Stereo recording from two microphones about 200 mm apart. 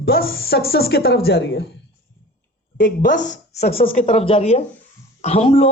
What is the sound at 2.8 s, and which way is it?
A man's voice, 40° left (ahead or behind).